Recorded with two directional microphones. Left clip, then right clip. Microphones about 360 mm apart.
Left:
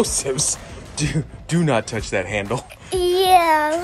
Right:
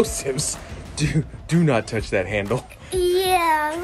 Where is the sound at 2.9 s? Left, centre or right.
Centre.